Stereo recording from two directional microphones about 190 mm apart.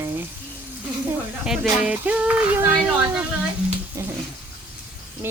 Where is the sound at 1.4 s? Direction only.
5° right (ahead or behind).